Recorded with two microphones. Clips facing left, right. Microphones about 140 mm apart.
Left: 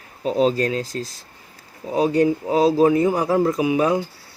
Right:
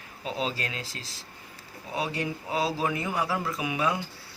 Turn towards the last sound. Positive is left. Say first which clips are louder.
# left 10 dB
turn(degrees=35)  # may be behind; listen again after turning